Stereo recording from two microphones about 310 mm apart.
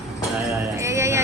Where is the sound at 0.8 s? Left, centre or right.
Centre.